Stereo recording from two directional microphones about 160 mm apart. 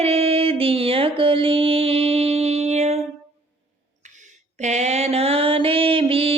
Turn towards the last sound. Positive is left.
turn(degrees=-35)  # may be behind; listen again after turning